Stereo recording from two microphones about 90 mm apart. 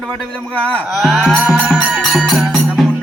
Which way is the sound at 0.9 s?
Centre (ahead or behind).